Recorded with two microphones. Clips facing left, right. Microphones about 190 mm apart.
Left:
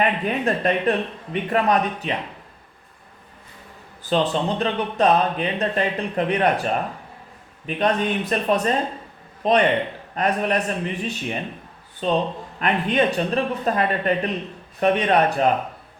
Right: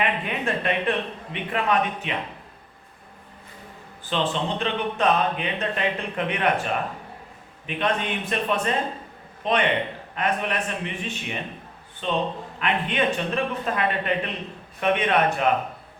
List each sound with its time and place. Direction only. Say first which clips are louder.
0.0 s speech: left 5 dB; 40° left (ahead or behind)
4.1 s speech: left 4 dB; 40° left (ahead or behind)
7.8 s a man's voice: left 4 dB; 40° left (ahead or behind)